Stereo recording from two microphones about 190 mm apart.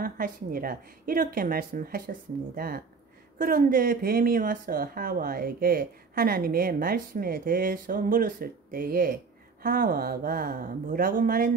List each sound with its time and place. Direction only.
0.0 s a woman's voice: 50° right (ahead or behind)